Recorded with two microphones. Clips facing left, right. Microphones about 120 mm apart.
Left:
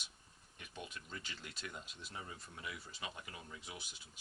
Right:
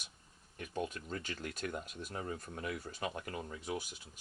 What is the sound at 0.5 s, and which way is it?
Speech, 45° right (ahead or behind).